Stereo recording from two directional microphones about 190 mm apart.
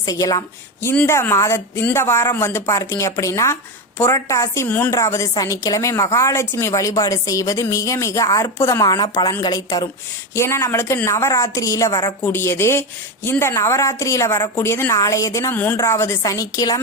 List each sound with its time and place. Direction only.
0.0 s a woman's voice: 20° left (ahead or behind)